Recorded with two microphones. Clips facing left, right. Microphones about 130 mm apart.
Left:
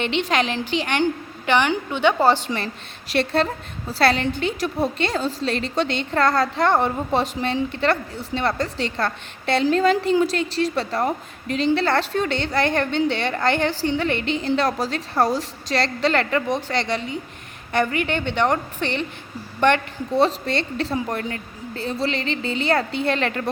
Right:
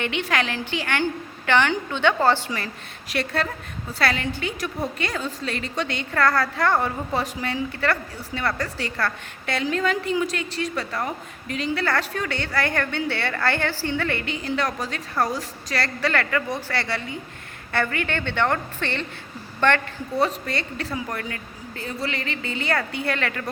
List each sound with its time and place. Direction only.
0.0 s a woman's voice: 25° left (ahead or behind)